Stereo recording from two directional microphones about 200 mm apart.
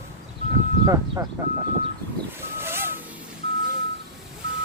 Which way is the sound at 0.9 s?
15° right (ahead or behind).